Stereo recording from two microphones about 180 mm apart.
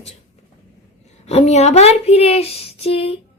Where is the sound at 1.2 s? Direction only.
35° left (ahead or behind).